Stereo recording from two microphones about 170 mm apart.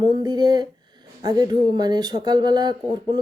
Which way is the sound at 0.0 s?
25° right (ahead or behind).